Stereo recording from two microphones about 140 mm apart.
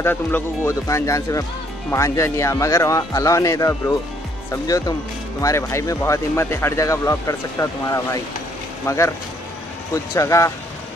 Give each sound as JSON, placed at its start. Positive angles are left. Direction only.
{"t": 0.0, "sound": "speech", "side_deg": 15}
{"t": 10.1, "sound": "speech", "side_deg": 20}